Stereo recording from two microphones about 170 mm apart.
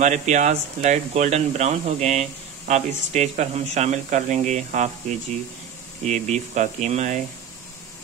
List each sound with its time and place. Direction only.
0.0 s speech: 45° right (ahead or behind)
6.0 s speech: 45° right (ahead or behind)